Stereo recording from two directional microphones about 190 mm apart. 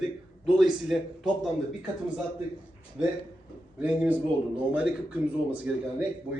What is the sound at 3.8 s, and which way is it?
Speech, 5° right (ahead or behind).